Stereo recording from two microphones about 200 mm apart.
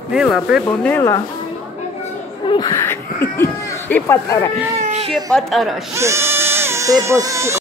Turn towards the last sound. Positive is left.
turn(degrees=-15)  # may be behind; listen again after turning